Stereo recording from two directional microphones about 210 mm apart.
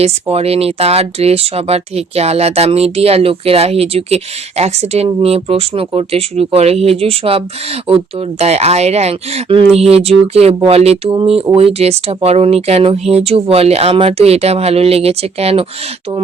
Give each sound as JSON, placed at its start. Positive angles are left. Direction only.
{"t": 0.0, "sound": "speech", "side_deg": -30}